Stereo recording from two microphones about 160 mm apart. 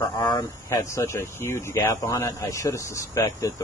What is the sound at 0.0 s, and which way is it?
Speech, 25° left (ahead or behind).